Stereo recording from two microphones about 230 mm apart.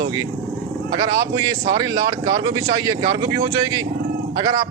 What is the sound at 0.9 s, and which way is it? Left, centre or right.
Speech, centre.